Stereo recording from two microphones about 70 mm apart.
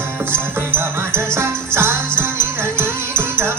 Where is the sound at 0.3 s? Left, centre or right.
Right.